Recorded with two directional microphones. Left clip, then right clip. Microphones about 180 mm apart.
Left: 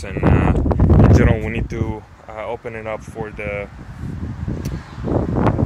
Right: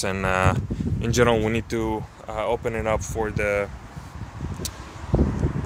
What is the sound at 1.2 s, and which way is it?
Speech, 20° right (ahead or behind).